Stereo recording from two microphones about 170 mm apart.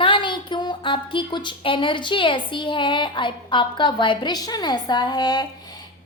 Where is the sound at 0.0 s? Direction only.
30° left (ahead or behind).